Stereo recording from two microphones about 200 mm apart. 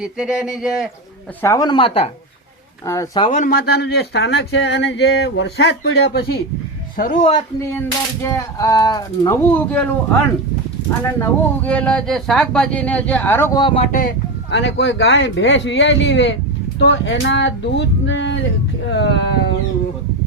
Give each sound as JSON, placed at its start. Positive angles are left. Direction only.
{"t": 0.0, "sound": "speech", "side_deg": -5}
{"t": 1.4, "sound": "speech", "side_deg": 15}
{"t": 2.8, "sound": "speech", "side_deg": 15}
{"t": 3.3, "sound": "speech", "side_deg": 45}
{"t": 7.6, "sound": "speech", "side_deg": 15}
{"t": 11.2, "sound": "speech", "side_deg": 5}
{"t": 14.5, "sound": "speech", "side_deg": 60}